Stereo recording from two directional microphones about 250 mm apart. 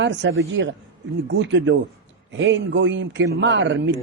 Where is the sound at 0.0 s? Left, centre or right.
Right.